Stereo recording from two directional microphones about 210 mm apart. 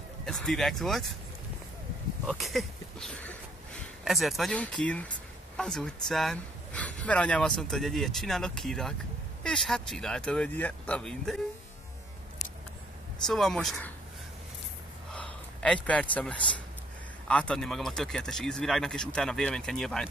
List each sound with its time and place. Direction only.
0.2 s speech: centre (ahead or behind)
2.2 s speech: centre (ahead or behind)
13.3 s speech: centre (ahead or behind)
15.1 s a sound: 5° left (ahead or behind)
16.4 s speech: 25° left (ahead or behind)
17.3 s speech: 5° left (ahead or behind)